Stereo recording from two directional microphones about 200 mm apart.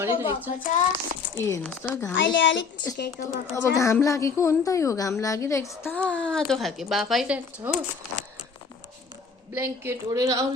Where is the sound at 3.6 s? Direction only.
15° left (ahead or behind); by 7.7 s 5° right (ahead or behind).